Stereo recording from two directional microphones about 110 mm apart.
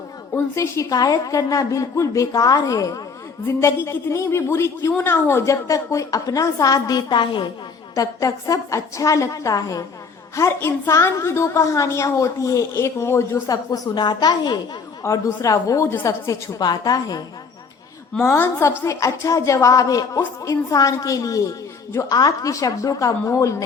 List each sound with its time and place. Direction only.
0.3 s a woman's voice: 25° left (ahead or behind); by 7.4 s 45° left (ahead or behind)
7.9 s a woman's voice: 30° left (ahead or behind)
15.0 s a woman's voice: 30° left (ahead or behind)
18.2 s a woman's voice: 20° left (ahead or behind)